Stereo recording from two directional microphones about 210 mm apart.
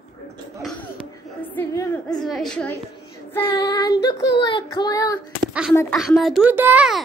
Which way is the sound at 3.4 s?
15° left (ahead or behind).